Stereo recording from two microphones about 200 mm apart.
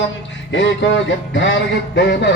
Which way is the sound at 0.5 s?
65° left (ahead or behind).